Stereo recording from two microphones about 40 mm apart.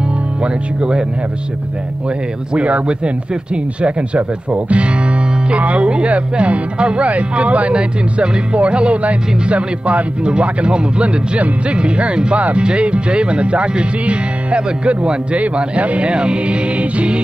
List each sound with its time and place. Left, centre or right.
0.4 s speech: right
2.5 s speech: right